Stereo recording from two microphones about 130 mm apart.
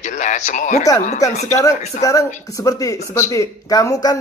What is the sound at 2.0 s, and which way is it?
Speech, 25° left (ahead or behind).